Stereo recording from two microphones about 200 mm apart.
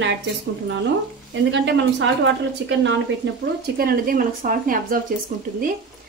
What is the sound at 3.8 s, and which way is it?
A woman's voice, 45° right (ahead or behind).